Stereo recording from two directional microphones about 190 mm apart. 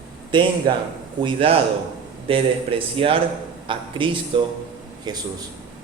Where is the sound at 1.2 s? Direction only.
30° right (ahead or behind).